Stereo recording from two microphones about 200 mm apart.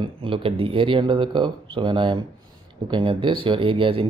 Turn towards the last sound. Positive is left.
turn(degrees=-25)  # may be behind; listen again after turning